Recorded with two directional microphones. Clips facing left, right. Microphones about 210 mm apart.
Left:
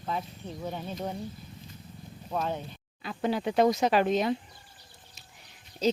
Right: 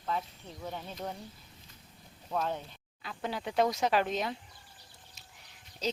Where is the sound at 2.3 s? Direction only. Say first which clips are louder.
Left 2 dB; 10° left (ahead or behind).